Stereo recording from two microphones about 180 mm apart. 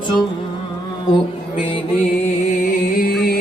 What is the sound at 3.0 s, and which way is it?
Music, 60° left (ahead or behind).